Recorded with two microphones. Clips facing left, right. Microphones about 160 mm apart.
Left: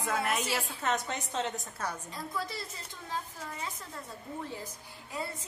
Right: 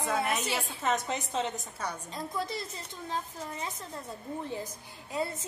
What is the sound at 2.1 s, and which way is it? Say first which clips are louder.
Speech: right 3 dB; 20° right (ahead or behind).